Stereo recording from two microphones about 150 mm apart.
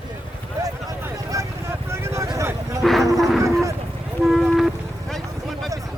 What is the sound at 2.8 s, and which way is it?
Livestock, centre (ahead or behind).